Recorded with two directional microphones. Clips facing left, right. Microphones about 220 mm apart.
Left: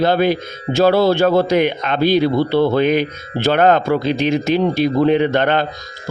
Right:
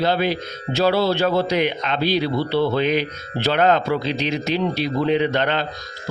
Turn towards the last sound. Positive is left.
turn(degrees=50)  # may be behind; listen again after turning